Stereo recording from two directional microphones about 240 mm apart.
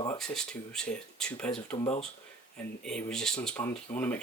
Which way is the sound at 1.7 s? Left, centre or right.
Left.